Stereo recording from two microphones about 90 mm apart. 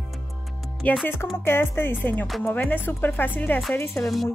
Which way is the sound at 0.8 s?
15° left (ahead or behind).